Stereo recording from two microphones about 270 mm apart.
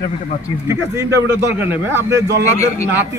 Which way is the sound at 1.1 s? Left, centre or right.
Right.